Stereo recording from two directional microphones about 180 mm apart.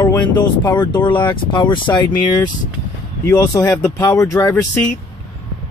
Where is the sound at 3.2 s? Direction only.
20° left (ahead or behind).